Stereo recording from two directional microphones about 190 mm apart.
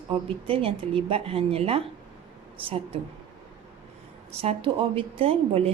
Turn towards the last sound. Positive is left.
turn(degrees=-30)  # may be behind; listen again after turning